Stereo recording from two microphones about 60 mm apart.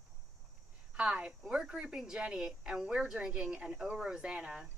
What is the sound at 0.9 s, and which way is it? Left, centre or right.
A woman's voice, centre.